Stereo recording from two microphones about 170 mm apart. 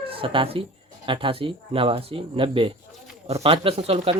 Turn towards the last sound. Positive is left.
turn(degrees=-35)  # may be behind; listen again after turning